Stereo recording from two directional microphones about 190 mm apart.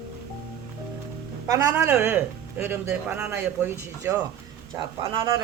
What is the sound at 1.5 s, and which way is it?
Speech, 15° right (ahead or behind).